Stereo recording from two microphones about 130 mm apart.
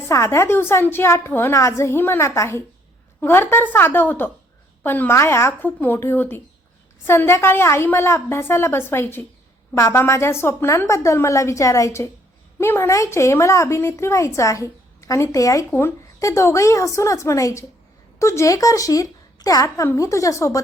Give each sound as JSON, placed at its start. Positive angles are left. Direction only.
{"t": 0.1, "sound": "a woman's voice", "side_deg": 20}